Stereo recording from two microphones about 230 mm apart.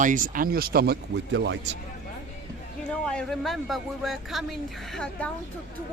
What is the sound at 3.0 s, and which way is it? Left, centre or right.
Speech, centre.